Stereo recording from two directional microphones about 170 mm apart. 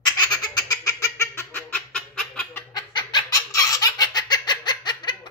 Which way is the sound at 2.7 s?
25° left (ahead or behind).